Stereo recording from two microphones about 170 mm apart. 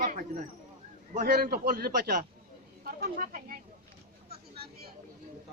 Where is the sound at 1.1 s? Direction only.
60° right (ahead or behind).